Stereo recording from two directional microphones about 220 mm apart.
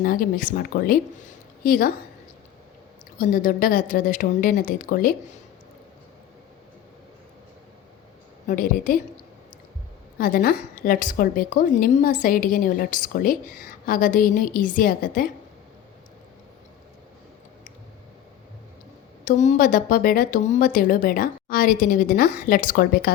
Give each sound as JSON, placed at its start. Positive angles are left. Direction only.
{"t": 0.0, "sound": "a woman's voice", "side_deg": 40}
{"t": 3.2, "sound": "a woman's voice", "side_deg": 40}
{"t": 8.4, "sound": "a woman's voice", "side_deg": 40}
{"t": 19.2, "sound": "a woman's voice", "side_deg": 35}